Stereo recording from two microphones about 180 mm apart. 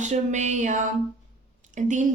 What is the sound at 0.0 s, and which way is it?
A woman's voice, 40° right (ahead or behind).